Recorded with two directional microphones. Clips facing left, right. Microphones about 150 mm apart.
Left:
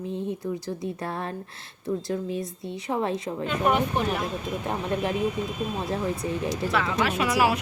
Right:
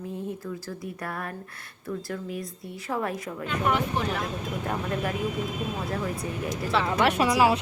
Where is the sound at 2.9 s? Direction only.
25° left (ahead or behind).